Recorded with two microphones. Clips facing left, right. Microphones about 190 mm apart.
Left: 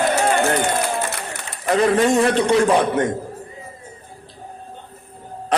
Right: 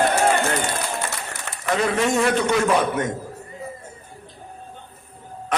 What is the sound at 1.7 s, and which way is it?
Music, 30° left (ahead or behind).